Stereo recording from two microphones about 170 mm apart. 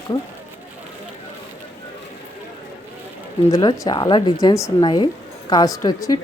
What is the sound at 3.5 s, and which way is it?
Speech, 25° left (ahead or behind).